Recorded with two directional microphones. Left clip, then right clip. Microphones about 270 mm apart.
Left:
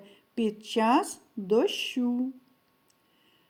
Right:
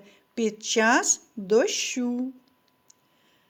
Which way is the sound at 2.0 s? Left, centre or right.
Right.